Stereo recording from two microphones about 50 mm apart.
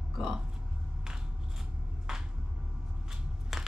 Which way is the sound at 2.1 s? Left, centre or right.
Centre.